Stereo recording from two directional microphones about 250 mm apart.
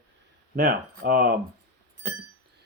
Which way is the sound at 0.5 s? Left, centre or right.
Right.